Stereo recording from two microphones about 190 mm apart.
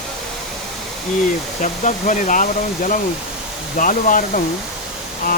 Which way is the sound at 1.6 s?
40° left (ahead or behind).